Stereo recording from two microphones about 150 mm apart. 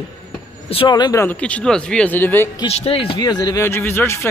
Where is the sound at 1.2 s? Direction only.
10° left (ahead or behind).